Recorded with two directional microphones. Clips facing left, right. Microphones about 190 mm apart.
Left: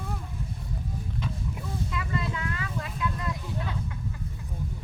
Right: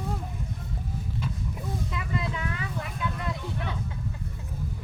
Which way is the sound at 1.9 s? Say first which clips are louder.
Left 1 dB; 20° right (ahead or behind).